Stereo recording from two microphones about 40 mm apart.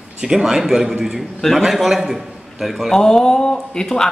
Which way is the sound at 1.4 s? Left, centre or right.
Centre.